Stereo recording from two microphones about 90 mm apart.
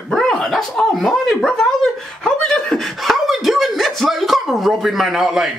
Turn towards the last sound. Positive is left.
turn(degrees=-5)  # may be behind; listen again after turning